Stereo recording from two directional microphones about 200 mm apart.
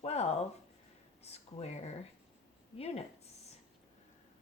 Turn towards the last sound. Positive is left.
turn(degrees=30)  # may be behind; listen again after turning